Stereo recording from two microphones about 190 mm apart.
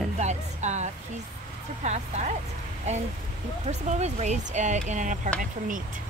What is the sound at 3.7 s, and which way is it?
Speech, 35° right (ahead or behind).